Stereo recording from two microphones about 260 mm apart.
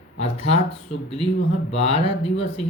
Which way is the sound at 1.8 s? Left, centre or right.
Left.